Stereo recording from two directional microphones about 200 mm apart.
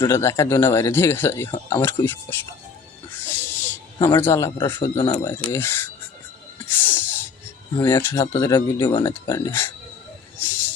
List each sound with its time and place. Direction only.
0.0 s speech: 15° left (ahead or behind)
3.2 s music: 10° left (ahead or behind)
3.9 s speech: 25° left (ahead or behind)
6.7 s sneeze: 10° left (ahead or behind)
7.8 s speech: 10° left (ahead or behind)